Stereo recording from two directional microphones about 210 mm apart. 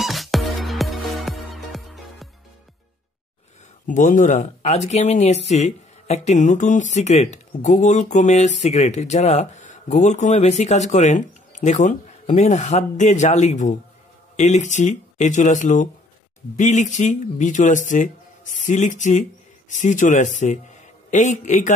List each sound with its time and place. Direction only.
0.0 s music: centre (ahead or behind)
3.8 s speech: 35° left (ahead or behind)